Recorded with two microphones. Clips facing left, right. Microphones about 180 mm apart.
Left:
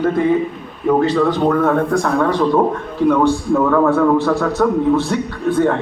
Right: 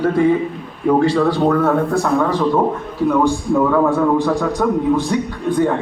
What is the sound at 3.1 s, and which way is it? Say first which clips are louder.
A man's voice: left 2 dB; 10° right (ahead or behind).